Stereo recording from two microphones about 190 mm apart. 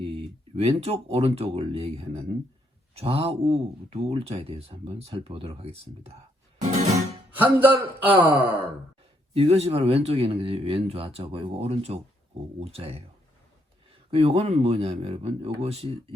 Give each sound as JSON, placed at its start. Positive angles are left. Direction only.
{"t": 0.0, "sound": "speech", "side_deg": -30}
{"t": 6.6, "sound": "music", "side_deg": -35}
{"t": 7.3, "sound": "a man's voice", "side_deg": -10}
{"t": 9.3, "sound": "speech", "side_deg": -30}
{"t": 14.1, "sound": "speech", "side_deg": -30}